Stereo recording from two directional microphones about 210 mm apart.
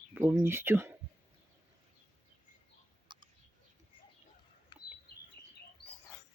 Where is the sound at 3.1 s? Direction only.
20° right (ahead or behind).